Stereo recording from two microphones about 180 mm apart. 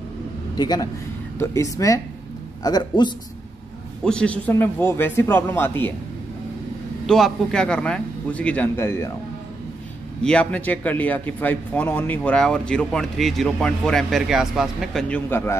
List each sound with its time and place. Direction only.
0.6 s a man's voice: 20° left (ahead or behind)
4.0 s a man's voice: 5° left (ahead or behind)
7.1 s a man's voice: centre (ahead or behind)
10.2 s speech: 5° left (ahead or behind)